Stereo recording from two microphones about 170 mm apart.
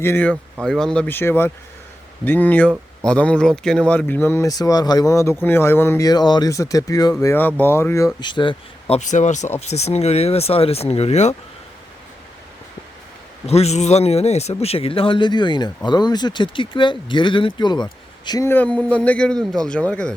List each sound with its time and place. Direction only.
0.0 s speech: 10° left (ahead or behind); by 9.0 s 30° left (ahead or behind)
9.0 s speech: 45° left (ahead or behind)
13.5 s speech: 40° left (ahead or behind); by 20.1 s 5° left (ahead or behind)